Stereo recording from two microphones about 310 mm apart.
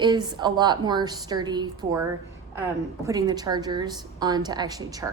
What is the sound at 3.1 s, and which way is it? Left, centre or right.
A woman's voice, centre.